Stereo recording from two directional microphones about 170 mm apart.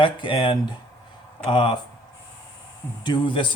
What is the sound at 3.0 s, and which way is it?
Speech, 30° left (ahead or behind).